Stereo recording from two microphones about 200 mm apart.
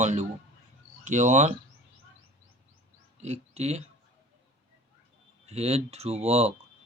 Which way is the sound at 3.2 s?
35° right (ahead or behind).